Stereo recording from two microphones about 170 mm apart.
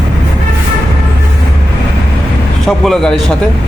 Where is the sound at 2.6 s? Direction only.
Centre (ahead or behind).